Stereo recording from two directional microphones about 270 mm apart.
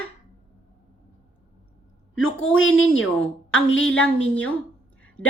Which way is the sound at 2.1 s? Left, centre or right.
Left.